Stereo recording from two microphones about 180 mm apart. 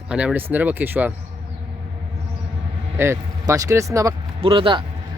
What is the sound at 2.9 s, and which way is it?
Speech, 15° right (ahead or behind).